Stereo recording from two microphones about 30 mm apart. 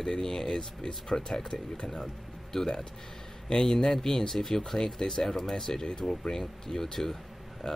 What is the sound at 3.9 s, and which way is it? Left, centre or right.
Speech, centre.